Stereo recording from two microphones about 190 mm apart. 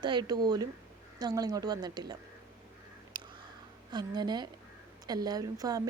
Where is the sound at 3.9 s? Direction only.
20° right (ahead or behind).